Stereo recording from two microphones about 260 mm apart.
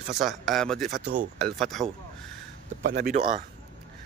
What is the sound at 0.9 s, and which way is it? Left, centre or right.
Speech, right.